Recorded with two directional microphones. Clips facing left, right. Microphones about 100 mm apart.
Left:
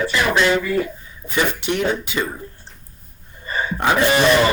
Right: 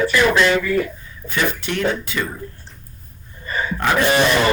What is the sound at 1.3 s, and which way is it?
Speech, 25° left (ahead or behind).